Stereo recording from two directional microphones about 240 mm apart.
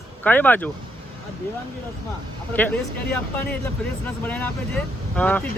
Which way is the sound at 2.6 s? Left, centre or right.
Centre.